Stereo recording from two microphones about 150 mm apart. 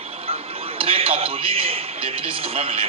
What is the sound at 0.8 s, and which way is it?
A man's voice, 40° right (ahead or behind).